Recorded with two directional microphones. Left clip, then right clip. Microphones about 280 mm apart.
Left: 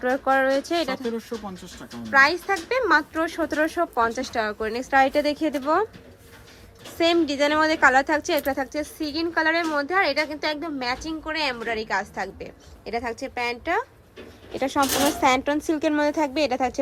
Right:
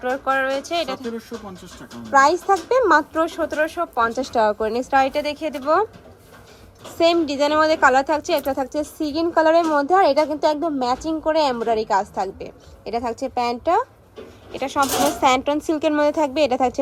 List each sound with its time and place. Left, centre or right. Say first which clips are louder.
0.0 s a woman's voice: even; centre
0.9 s a woman's voice: left 1 dB; centre
6.9 s a woman's voice: right 3 dB; centre
15.2 s a woman's voice: right 3 dB; centre